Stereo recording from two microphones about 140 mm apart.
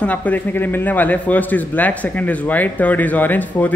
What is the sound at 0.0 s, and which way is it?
A man's voice, 10° left (ahead or behind).